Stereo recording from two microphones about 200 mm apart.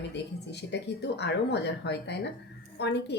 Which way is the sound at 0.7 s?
60° left (ahead or behind).